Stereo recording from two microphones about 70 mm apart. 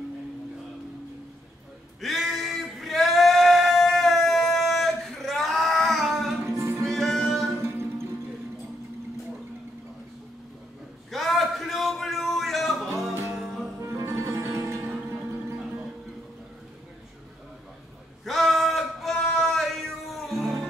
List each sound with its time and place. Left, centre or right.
2.0 s singing: centre
6.4 s music: right
6.8 s music: centre
7.6 s music: right
11.1 s a sound: centre
13.1 s music: right
18.2 s a sound: centre